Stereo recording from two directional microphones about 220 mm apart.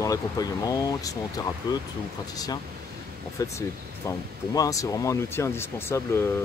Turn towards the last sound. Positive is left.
turn(degrees=10)  # may be behind; listen again after turning